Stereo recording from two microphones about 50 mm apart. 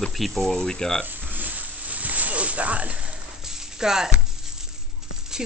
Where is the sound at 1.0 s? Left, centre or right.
Right.